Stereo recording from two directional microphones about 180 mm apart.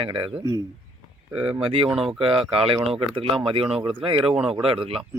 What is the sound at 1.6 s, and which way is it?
Speech, 30° right (ahead or behind).